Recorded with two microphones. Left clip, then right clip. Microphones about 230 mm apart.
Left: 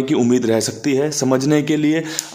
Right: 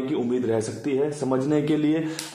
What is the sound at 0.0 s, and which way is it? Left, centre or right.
A man's voice, left.